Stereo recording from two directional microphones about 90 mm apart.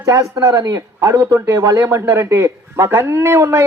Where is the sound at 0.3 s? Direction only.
40° right (ahead or behind).